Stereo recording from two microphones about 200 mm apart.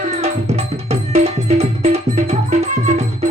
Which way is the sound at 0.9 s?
35° right (ahead or behind).